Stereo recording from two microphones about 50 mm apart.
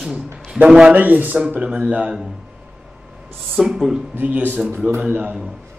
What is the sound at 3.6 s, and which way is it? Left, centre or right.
Speech, centre.